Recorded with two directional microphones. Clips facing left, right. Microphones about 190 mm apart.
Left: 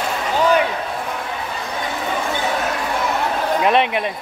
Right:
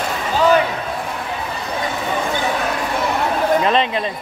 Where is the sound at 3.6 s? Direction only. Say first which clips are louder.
Left 1 dB; 15° left (ahead or behind).